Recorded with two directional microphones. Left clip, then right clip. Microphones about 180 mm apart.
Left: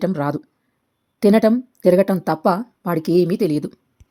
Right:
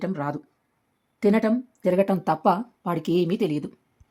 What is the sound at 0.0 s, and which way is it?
A woman's voice, 25° left (ahead or behind).